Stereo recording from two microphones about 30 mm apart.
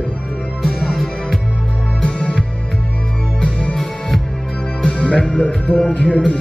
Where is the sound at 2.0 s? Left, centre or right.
Left.